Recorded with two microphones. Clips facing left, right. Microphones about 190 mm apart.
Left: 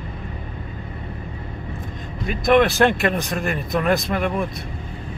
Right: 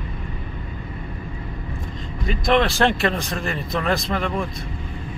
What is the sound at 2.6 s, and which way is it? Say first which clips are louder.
Speech: left 2 dB; 20° left (ahead or behind).